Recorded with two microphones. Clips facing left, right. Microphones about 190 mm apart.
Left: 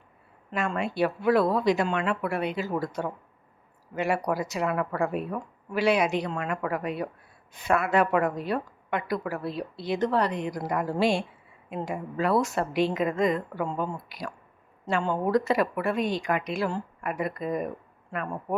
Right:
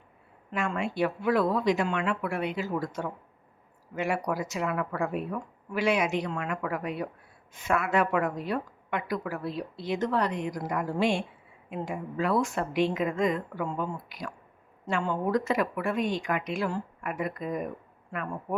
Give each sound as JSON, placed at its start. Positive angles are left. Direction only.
{"t": 0.5, "sound": "a woman's voice", "side_deg": 40}